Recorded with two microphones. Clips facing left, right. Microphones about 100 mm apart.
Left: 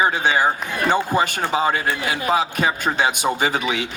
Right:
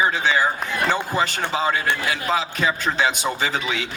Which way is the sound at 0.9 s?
20° left (ahead or behind).